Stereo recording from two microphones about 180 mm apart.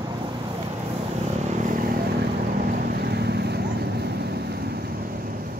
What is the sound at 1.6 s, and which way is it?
Vehicle, 50° right (ahead or behind).